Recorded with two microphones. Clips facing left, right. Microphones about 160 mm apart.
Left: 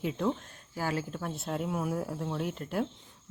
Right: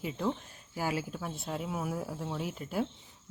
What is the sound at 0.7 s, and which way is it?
Speech, 10° right (ahead or behind).